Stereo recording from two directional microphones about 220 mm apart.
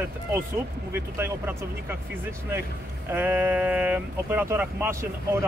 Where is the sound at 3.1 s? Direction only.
10° right (ahead or behind).